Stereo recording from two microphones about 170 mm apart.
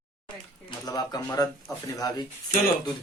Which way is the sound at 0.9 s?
20° left (ahead or behind).